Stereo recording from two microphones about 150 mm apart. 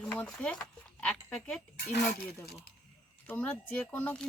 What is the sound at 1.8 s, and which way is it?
Speech, 75° left (ahead or behind).